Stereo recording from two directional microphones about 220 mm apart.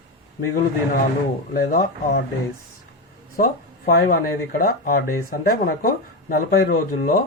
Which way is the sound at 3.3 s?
40° left (ahead or behind).